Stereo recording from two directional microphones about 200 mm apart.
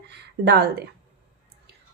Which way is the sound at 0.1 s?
55° right (ahead or behind).